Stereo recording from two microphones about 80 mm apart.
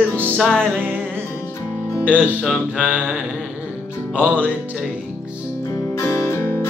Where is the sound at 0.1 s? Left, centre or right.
Right.